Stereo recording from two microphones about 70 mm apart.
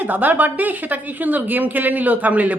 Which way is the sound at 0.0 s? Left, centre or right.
Right.